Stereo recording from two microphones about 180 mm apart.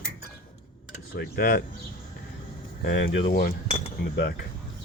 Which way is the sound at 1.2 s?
55° left (ahead or behind).